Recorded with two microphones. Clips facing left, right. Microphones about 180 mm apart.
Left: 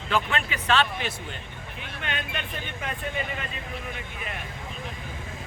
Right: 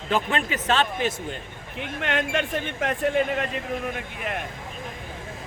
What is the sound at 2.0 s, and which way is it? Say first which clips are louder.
Speech: right 9 dB; 90° right.